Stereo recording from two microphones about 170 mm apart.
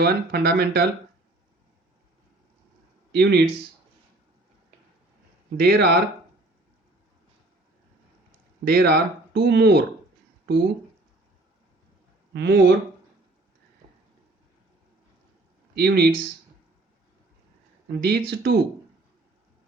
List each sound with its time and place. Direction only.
0.0 s speech: 70° right (ahead or behind)
3.1 s speech: 75° right (ahead or behind)
5.5 s speech: 75° right (ahead or behind)
8.6 s speech: 70° right (ahead or behind)
12.3 s speech: 80° right
13.8 s a sound: 45° right (ahead or behind)
15.7 s speech: 70° right (ahead or behind)
18.0 s speech: 70° right (ahead or behind)